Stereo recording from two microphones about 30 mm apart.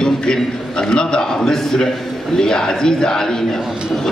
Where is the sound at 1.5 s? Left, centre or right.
Centre.